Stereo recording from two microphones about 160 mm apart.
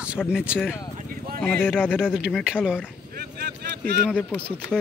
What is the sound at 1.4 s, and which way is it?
Speech, 10° left (ahead or behind).